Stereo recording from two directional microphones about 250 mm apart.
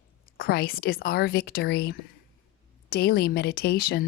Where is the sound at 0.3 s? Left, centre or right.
Left.